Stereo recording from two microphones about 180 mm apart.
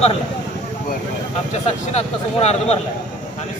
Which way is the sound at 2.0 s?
40° left (ahead or behind).